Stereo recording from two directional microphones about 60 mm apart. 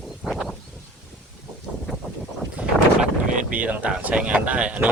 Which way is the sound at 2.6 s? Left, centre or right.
Right.